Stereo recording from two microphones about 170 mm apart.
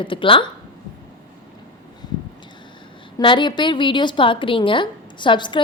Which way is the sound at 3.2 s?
30° left (ahead or behind).